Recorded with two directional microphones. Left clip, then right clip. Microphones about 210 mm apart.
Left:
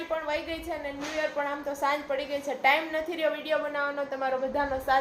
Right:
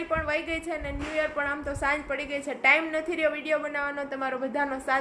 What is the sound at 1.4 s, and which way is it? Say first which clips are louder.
A woman's voice: even; 20° right (ahead or behind).